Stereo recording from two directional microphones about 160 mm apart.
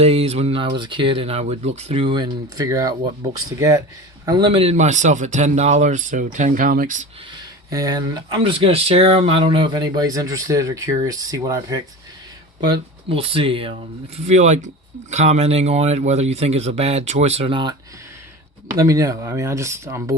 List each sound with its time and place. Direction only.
0.0 s speech: 40° right (ahead or behind); by 2.9 s 20° right (ahead or behind)
4.3 s a man's voice: 30° right (ahead or behind); by 7.1 s 55° right (ahead or behind)
7.7 s speech: 25° right (ahead or behind)
14.3 s a man's voice: 45° right (ahead or behind); by 17.7 s 30° right (ahead or behind)
18.8 s speech: 20° right (ahead or behind)